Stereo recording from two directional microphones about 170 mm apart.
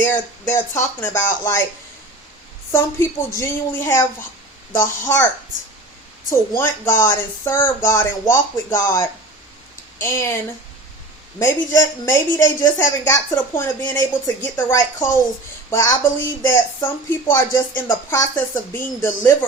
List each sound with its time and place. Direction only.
0.0 s a woman's voice: 10° left (ahead or behind)
2.7 s a woman's voice: 15° left (ahead or behind)
6.6 s a woman's voice: 15° left (ahead or behind)
11.3 s a woman's voice: 20° left (ahead or behind)